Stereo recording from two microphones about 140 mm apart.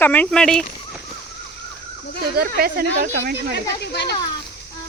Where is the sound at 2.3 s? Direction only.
90° right.